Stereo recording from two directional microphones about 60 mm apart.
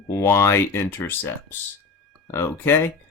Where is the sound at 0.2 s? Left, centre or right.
Left.